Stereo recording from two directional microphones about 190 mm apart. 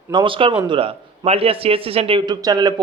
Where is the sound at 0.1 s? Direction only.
25° right (ahead or behind).